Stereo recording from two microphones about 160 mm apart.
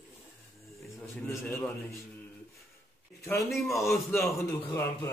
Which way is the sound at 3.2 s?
20° left (ahead or behind).